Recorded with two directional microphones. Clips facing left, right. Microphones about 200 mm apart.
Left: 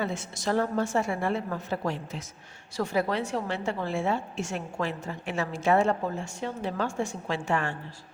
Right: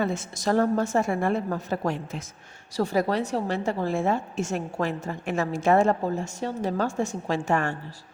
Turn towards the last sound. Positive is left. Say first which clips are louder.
# right 3 dB
turn(degrees=-45)  # may be behind; listen again after turning